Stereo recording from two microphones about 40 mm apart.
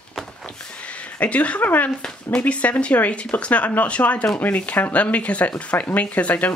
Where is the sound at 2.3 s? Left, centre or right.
Left.